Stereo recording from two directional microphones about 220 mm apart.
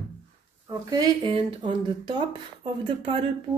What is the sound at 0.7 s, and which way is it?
Speech, 20° right (ahead or behind).